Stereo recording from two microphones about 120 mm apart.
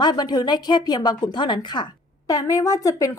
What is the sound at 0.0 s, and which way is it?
A woman's voice, 35° left (ahead or behind).